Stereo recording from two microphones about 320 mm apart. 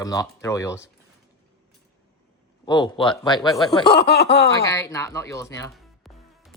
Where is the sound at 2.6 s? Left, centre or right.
Centre.